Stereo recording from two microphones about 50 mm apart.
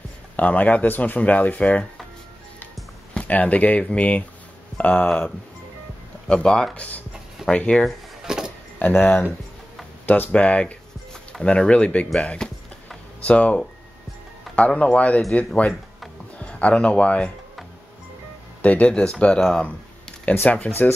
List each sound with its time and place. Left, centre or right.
0.4 s speech: left
3.2 s speech: left
6.2 s speech: centre
7.8 s drawer open or close: centre
8.7 s speech: left
10.3 s speech: left
13.2 s speech: left
18.6 s speech: left